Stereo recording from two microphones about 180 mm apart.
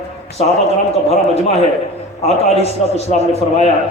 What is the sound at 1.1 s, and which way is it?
A man's voice, 35° left (ahead or behind).